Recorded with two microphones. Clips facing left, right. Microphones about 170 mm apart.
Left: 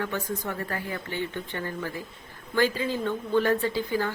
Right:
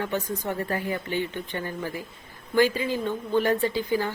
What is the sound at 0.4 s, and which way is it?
A woman's voice, 20° right (ahead or behind).